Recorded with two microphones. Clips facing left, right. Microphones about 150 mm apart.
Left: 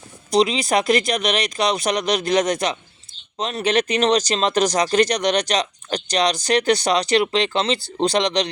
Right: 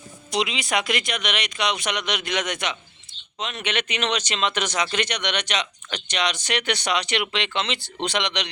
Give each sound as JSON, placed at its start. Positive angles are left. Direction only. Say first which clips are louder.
{"t": 0.3, "sound": "speech", "louder": "left 8 dB", "side_deg": 35}